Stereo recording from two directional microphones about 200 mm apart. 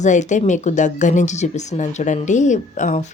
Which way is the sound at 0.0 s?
35° left (ahead or behind).